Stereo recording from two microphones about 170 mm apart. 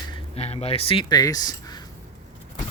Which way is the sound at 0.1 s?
40° left (ahead or behind).